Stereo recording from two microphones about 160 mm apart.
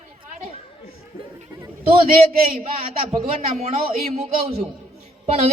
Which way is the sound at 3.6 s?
40° right (ahead or behind).